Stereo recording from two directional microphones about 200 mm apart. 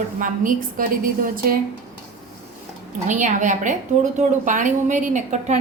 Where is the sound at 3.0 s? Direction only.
40° right (ahead or behind).